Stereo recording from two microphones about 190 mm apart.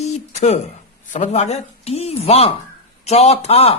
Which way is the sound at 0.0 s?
35° left (ahead or behind).